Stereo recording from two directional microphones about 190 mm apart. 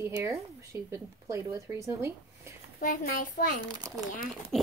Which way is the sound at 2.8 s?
45° left (ahead or behind).